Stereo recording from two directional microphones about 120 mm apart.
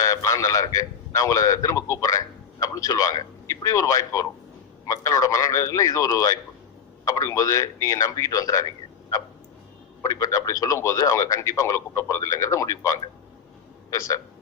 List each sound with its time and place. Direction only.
0.0 s a man's voice: 30° left (ahead or behind)
10.0 s speech: 30° left (ahead or behind)